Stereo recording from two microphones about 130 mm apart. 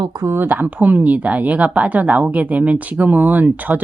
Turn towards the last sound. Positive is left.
turn(degrees=-15)  # may be behind; listen again after turning